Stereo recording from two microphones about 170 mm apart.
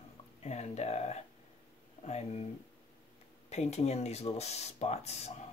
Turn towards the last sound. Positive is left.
turn(degrees=40)  # may be behind; listen again after turning